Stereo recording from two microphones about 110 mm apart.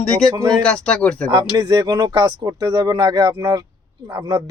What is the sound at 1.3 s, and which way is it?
Speech, 40° right (ahead or behind).